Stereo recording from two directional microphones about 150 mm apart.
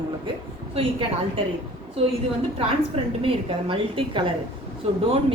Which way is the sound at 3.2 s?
35° right (ahead or behind).